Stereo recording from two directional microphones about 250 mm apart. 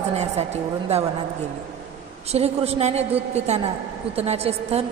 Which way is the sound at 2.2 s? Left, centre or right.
Right.